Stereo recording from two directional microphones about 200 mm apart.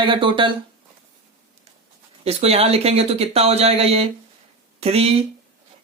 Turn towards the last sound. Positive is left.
turn(degrees=-30)  # may be behind; listen again after turning